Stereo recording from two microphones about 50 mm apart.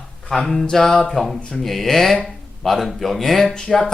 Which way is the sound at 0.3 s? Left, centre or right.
Centre.